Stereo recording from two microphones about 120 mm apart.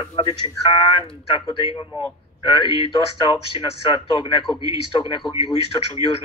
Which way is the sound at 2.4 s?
45° left (ahead or behind).